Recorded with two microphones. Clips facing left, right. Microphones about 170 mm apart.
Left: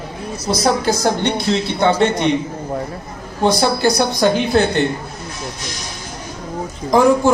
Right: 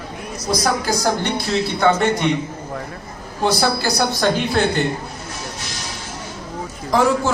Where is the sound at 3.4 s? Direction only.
20° left (ahead or behind).